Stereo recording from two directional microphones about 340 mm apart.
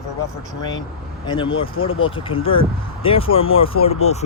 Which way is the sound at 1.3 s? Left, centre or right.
Centre.